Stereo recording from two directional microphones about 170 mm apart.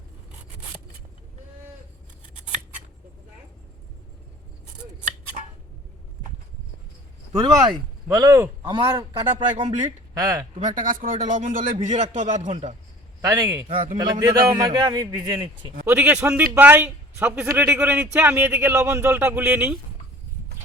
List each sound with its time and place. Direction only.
7.3 s a man's voice: 30° right (ahead or behind)
10.8 s a man's voice: 50° right (ahead or behind)
13.2 s a man's voice: 20° right (ahead or behind)
13.7 s a man's voice: 50° right (ahead or behind)
14.0 s a man's voice: 25° right (ahead or behind)
15.9 s a man's voice: 10° right (ahead or behind)